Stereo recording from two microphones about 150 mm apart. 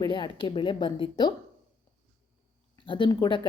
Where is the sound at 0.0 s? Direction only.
30° left (ahead or behind).